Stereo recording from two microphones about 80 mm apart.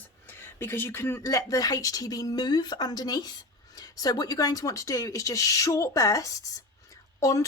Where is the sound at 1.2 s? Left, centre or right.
Left.